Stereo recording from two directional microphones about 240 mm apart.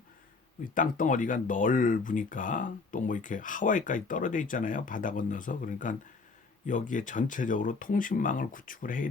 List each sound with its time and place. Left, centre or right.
0.6 s speech: left